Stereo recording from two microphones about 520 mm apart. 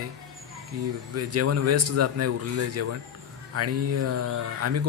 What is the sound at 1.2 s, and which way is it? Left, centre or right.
Speech, right.